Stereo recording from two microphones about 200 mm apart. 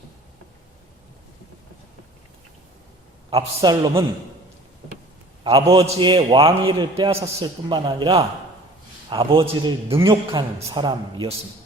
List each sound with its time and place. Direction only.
3.2 s a man's voice: 20° right (ahead or behind)
5.4 s a man's voice: 25° right (ahead or behind)